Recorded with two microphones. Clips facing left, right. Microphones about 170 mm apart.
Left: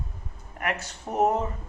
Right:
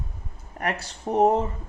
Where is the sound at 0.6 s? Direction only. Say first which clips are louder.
Right 2 dB; 35° right (ahead or behind).